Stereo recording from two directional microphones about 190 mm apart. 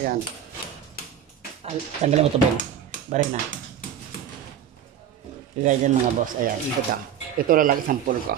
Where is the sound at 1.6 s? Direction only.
35° right (ahead or behind).